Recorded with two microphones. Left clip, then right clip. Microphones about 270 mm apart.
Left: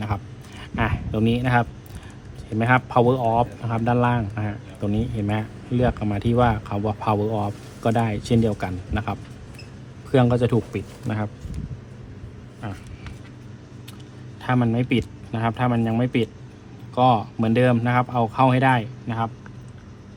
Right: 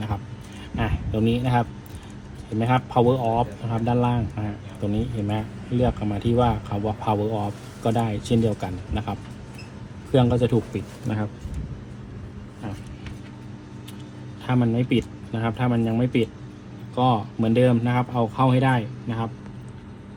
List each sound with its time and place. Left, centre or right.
0.8 s a sound: left
2.6 s speech: left
14.4 s speech: left